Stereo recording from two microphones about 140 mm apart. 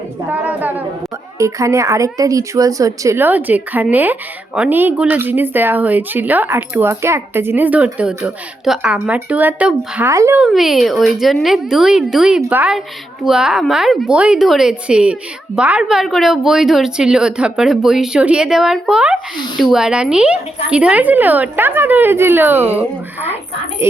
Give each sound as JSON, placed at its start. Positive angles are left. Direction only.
{"t": 0.3, "sound": "a sound", "side_deg": -15}
{"t": 1.4, "sound": "speech", "side_deg": -20}
{"t": 10.4, "sound": "a woman's voice", "side_deg": 0}